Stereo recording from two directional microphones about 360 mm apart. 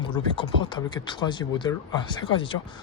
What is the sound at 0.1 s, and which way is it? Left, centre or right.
Speech, centre.